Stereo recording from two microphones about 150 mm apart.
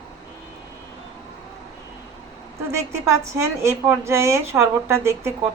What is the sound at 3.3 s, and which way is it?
A woman's voice, 20° right (ahead or behind).